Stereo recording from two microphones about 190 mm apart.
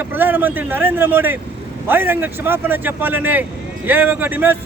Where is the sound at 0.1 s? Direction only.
10° right (ahead or behind).